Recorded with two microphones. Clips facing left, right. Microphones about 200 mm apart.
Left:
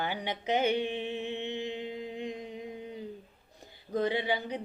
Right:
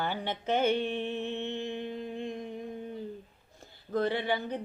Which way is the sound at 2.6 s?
15° left (ahead or behind).